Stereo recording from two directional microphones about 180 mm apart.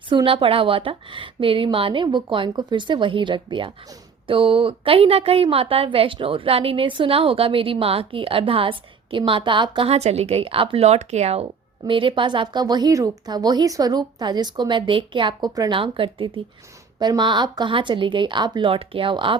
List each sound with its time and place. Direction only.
0.1 s a woman's voice: 25° right (ahead or behind)